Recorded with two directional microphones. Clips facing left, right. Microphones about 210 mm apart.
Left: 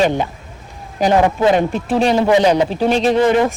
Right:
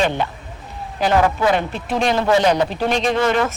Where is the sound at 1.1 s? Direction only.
20° left (ahead or behind).